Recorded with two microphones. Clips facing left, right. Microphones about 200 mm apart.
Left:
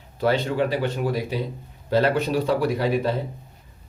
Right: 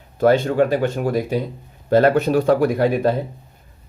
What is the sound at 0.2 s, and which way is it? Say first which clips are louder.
Speech: right 6 dB; 50° right (ahead or behind).